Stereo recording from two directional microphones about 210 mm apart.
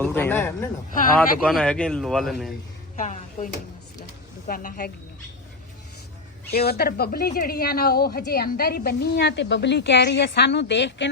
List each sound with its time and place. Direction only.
0.0 s a man's voice: 10° left (ahead or behind)
2.9 s speech: 35° left (ahead or behind)
6.5 s speech: 50° left (ahead or behind)